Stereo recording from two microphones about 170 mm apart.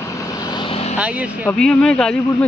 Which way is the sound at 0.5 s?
30° left (ahead or behind).